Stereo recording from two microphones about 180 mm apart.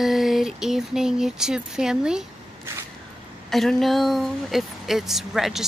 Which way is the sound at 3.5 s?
Centre (ahead or behind).